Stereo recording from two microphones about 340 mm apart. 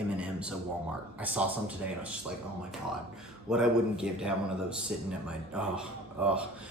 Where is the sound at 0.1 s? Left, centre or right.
Centre.